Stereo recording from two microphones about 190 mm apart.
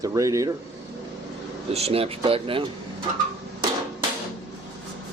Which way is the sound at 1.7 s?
30° right (ahead or behind).